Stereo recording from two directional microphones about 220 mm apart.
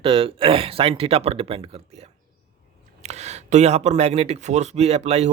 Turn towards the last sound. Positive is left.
turn(degrees=-30)  # may be behind; listen again after turning